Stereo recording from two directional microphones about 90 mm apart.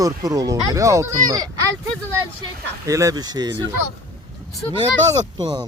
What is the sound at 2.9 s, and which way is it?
Speech, 35° right (ahead or behind).